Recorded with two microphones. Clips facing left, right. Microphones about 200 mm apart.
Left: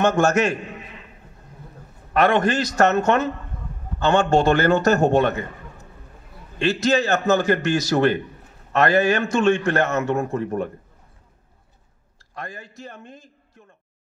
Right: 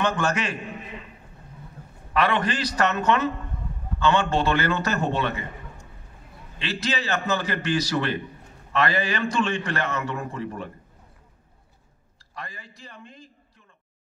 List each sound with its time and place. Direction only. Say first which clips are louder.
0.0 s a man's voice: left 7 dB; 45° left (ahead or behind)
2.1 s a man's voice: left 5 dB; 45° left (ahead or behind)
6.6 s a man's voice: left 9 dB; 45° left (ahead or behind)
12.4 s a man's voice: left 5 dB; 50° left (ahead or behind)